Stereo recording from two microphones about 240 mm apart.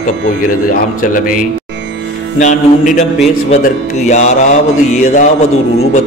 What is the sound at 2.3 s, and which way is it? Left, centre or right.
Music, left.